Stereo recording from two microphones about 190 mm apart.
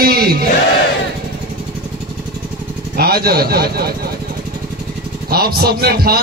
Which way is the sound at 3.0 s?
55° right (ahead or behind).